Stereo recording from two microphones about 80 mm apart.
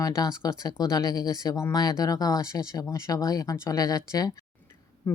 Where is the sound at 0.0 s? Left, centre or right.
Left.